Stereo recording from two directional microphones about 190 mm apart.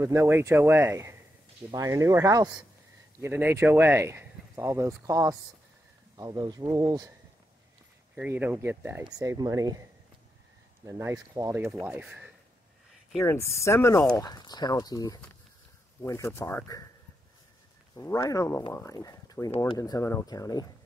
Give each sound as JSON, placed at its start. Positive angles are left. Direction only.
{"t": 0.0, "sound": "speech", "side_deg": -15}
{"t": 8.1, "sound": "speech", "side_deg": -10}
{"t": 10.9, "sound": "speech", "side_deg": -15}
{"t": 13.2, "sound": "speech", "side_deg": 15}
{"t": 17.9, "sound": "speech", "side_deg": 20}